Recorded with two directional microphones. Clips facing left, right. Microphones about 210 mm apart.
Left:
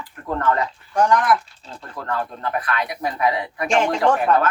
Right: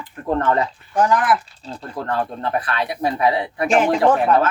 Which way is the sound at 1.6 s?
30° right (ahead or behind).